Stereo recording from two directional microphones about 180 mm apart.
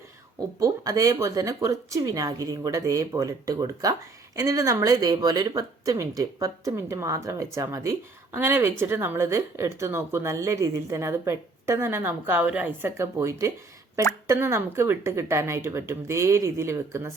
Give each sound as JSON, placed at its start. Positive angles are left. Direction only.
{"t": 0.3, "sound": "speech", "side_deg": -20}